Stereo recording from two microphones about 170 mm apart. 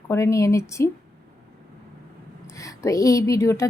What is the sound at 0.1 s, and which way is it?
Speech, 15° left (ahead or behind).